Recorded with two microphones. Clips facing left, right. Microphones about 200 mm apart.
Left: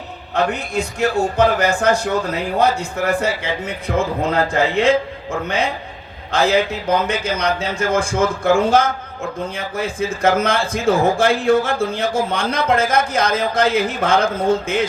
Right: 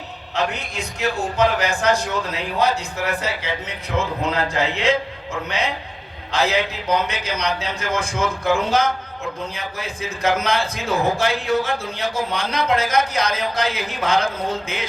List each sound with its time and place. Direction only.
0.3 s a man's voice: 55° left (ahead or behind)